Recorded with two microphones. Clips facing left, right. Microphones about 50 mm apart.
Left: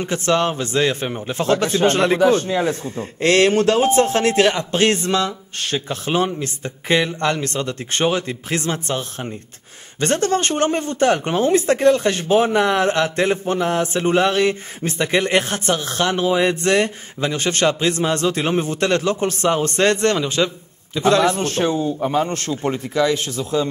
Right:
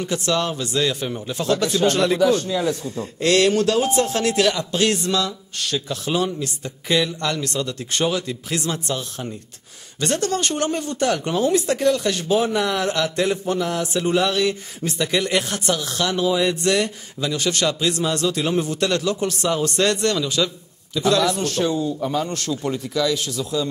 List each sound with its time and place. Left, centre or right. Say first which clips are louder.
0.0 s speech: left 4 dB; left